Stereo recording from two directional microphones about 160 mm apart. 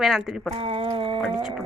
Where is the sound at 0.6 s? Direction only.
35° right (ahead or behind).